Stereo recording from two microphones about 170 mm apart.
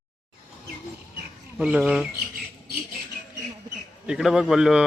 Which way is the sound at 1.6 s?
5° right (ahead or behind).